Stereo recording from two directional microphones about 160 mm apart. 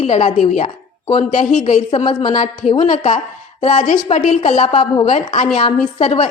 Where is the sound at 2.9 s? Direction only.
45° left (ahead or behind).